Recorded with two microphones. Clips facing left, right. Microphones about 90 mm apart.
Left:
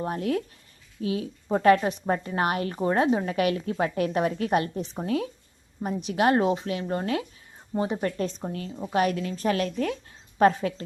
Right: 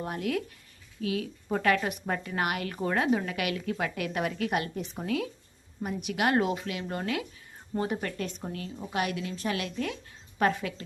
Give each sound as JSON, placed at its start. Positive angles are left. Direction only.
{"t": 0.0, "sound": "speech", "side_deg": 35}
{"t": 9.0, "sound": "speech", "side_deg": 40}